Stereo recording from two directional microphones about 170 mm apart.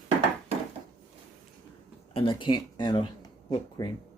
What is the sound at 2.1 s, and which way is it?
Speech, 30° left (ahead or behind).